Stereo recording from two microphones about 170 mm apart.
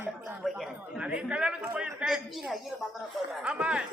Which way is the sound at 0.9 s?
5° right (ahead or behind).